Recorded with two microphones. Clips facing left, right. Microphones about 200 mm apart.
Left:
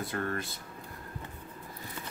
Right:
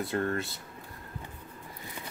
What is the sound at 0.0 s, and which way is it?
Speech, 25° right (ahead or behind).